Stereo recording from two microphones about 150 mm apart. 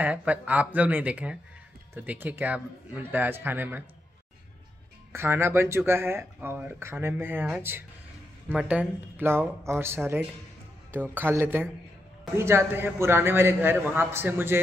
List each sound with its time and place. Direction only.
0.0 s speech: 10° right (ahead or behind)
5.1 s speech: 15° right (ahead or behind)
8.5 s speech: 10° right (ahead or behind)